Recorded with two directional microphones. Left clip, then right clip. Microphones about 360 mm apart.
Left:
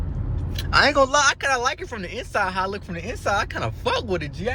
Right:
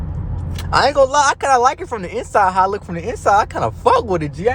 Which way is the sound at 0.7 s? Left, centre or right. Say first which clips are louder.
Right 4 dB; centre.